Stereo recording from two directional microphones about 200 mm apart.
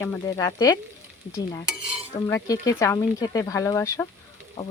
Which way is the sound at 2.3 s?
15° left (ahead or behind).